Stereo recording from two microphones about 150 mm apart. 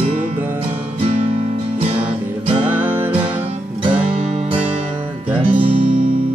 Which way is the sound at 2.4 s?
40° right (ahead or behind).